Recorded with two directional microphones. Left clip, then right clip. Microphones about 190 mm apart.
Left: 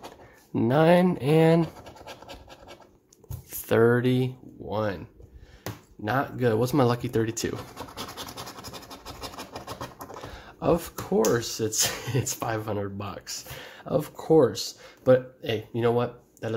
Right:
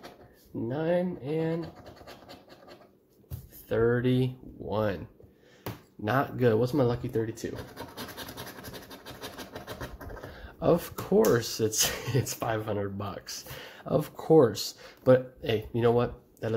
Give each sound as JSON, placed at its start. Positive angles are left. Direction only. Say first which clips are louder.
{"t": 0.6, "sound": "speech", "louder": "left 9 dB", "side_deg": 35}
{"t": 3.6, "sound": "speech", "louder": "left 5 dB", "side_deg": 30}
{"t": 3.9, "sound": "speech", "louder": "left 3 dB", "side_deg": 10}
{"t": 4.6, "sound": "speech", "louder": "left 1 dB", "side_deg": 0}
{"t": 6.0, "sound": "speech", "louder": "even", "side_deg": -5}
{"t": 6.6, "sound": "speech", "louder": "left 3 dB", "side_deg": 20}
{"t": 10.3, "sound": "speech", "louder": "left 1 dB", "side_deg": 5}